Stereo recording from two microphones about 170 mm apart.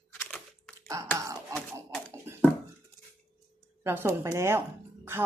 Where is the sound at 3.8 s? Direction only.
15° right (ahead or behind).